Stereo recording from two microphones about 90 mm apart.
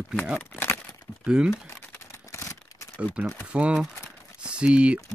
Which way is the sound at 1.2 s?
10° right (ahead or behind).